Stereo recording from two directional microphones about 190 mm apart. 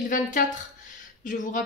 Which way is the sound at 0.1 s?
45° left (ahead or behind).